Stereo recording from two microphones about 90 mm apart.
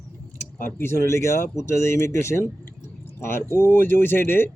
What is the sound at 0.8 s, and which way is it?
Speech, 30° left (ahead or behind).